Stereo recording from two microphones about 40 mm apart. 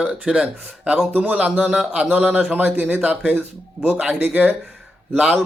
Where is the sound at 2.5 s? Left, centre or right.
Right.